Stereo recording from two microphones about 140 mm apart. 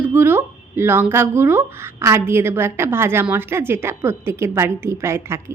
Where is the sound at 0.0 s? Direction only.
15° right (ahead or behind).